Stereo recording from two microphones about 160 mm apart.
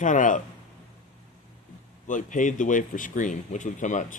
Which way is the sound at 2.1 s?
55° left (ahead or behind).